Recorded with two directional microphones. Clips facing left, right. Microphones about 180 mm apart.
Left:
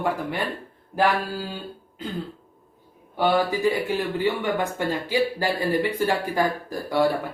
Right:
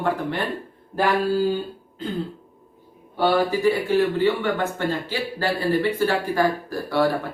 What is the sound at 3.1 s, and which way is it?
Speech, 15° left (ahead or behind).